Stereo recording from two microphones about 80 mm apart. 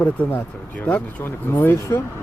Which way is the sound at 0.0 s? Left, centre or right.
Left.